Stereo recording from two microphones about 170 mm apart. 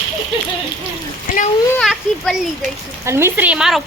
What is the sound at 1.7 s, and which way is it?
Children playing, centre (ahead or behind).